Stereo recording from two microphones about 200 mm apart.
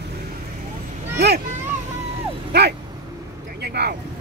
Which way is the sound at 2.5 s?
55° right (ahead or behind).